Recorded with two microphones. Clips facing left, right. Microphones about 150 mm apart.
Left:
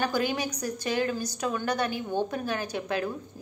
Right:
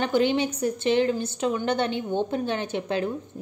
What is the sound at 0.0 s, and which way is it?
A woman's voice, 25° right (ahead or behind).